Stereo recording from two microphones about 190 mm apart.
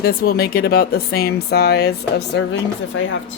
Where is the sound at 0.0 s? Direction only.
55° left (ahead or behind).